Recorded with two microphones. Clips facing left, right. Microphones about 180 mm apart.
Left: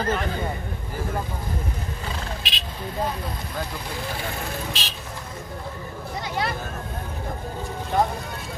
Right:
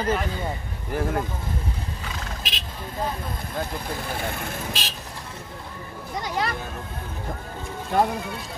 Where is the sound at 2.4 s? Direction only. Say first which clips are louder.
Even; 45° right (ahead or behind).